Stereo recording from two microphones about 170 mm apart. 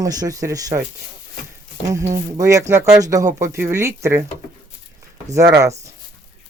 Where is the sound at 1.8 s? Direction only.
20° right (ahead or behind).